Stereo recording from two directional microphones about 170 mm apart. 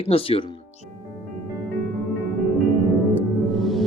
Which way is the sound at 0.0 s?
35° left (ahead or behind).